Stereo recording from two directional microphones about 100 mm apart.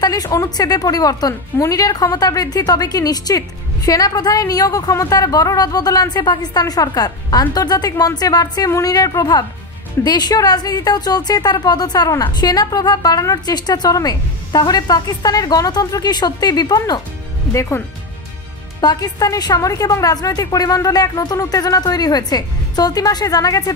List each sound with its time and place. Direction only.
0.0 s a woman's voice: 40° left (ahead or behind)
17.5 s speech: 25° left (ahead or behind)
18.8 s a woman's voice: 40° left (ahead or behind)